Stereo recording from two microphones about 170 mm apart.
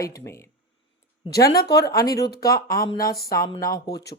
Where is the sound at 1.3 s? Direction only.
65° left (ahead or behind).